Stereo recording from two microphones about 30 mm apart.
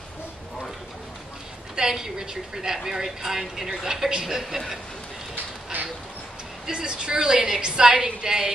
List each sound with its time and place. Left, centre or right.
1.8 s a woman's voice: centre
5.3 s a sound: right
6.6 s a woman's voice: right